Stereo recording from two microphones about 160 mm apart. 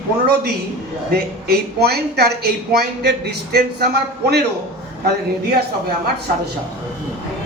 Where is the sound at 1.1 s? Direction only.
75° right (ahead or behind).